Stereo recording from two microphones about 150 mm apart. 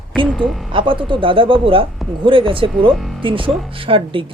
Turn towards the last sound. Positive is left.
turn(degrees=-35)  # may be behind; listen again after turning